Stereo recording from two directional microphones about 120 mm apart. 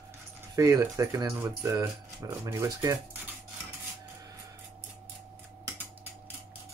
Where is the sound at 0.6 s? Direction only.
30° right (ahead or behind).